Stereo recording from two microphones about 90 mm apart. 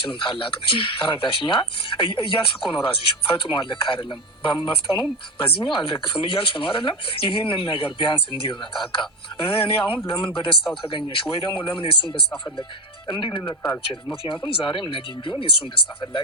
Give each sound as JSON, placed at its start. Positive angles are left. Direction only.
{"t": 0.0, "sound": "speech", "side_deg": 75}
{"t": 9.5, "sound": "speech", "side_deg": 80}
{"t": 13.1, "sound": "speech", "side_deg": 60}
{"t": 14.5, "sound": "speech", "side_deg": 70}